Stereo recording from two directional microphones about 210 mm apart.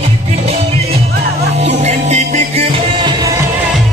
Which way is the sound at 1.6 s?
30° right (ahead or behind).